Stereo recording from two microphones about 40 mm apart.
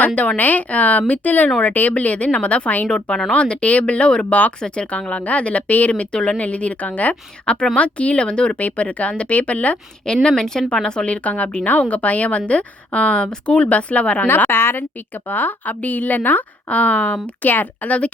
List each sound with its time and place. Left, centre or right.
0.2 s a woman's voice: left
2.8 s a woman's voice: left
5.9 s a woman's voice: left
7.4 s a woman's voice: left
10.2 s a woman's voice: centre; by 14.3 s left
14.3 s a woman's voice: left
14.5 s a woman's voice: left
15.3 s a woman's voice: left
16.6 s a woman's voice: left
17.4 s a woman's voice: left